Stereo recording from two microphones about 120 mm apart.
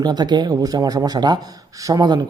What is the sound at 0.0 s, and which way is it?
Speech, 35° right (ahead or behind).